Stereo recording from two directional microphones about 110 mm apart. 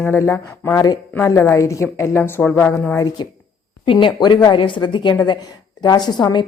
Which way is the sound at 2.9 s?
35° left (ahead or behind).